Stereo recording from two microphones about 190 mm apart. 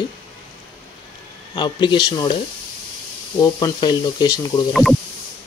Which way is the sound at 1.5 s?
25° left (ahead or behind).